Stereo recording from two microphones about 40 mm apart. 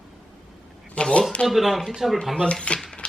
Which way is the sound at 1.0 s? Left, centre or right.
Left.